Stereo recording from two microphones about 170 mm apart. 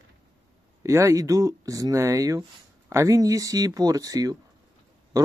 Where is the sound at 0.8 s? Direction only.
15° right (ahead or behind).